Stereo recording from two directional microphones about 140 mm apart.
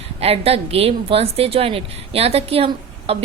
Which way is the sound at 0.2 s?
45° right (ahead or behind).